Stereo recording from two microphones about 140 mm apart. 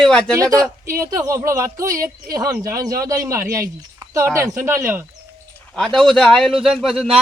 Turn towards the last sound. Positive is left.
turn(degrees=0)  # may be behind; listen again after turning